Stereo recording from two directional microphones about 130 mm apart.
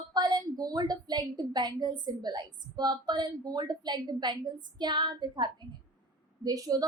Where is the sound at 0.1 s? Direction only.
35° right (ahead or behind).